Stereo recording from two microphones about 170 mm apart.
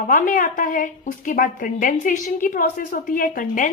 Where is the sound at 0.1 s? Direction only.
50° left (ahead or behind).